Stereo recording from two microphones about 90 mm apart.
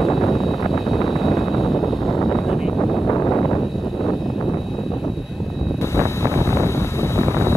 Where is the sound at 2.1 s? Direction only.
55° left (ahead or behind).